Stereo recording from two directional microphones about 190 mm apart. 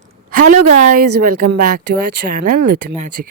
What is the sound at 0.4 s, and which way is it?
Speech, 45° right (ahead or behind).